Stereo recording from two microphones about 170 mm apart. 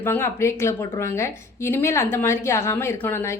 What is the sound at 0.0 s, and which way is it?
A woman's voice, 15° left (ahead or behind).